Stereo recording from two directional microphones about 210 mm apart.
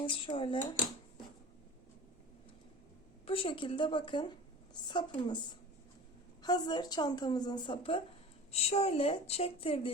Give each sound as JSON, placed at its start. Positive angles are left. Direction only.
{"t": 0.0, "sound": "a woman's voice", "side_deg": 25}
{"t": 3.2, "sound": "a woman's voice", "side_deg": 25}
{"t": 6.4, "sound": "a woman's voice", "side_deg": 20}